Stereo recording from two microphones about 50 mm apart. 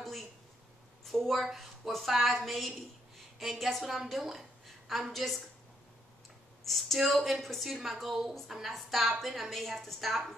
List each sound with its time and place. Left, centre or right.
1.0 s a woman's voice: centre
6.6 s a woman's voice: centre